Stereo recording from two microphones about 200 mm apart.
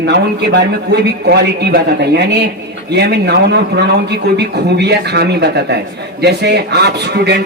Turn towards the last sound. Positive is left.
turn(degrees=-55)  # may be behind; listen again after turning